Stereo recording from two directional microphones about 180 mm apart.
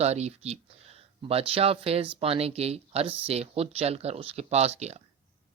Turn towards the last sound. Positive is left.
turn(degrees=-40)  # may be behind; listen again after turning